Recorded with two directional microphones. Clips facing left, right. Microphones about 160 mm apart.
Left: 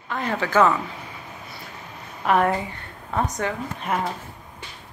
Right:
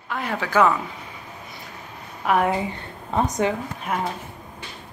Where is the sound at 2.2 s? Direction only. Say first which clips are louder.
Even; 10° right (ahead or behind).